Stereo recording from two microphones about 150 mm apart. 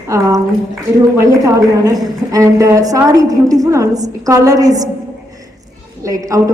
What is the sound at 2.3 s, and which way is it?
A woman's voice, 25° right (ahead or behind).